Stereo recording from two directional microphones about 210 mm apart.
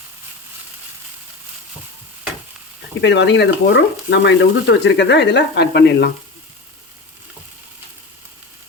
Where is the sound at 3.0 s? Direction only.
55° left (ahead or behind).